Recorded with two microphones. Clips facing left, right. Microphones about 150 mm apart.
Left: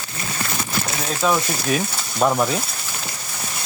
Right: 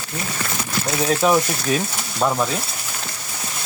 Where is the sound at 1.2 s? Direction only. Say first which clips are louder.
Right 2 dB; 15° right (ahead or behind).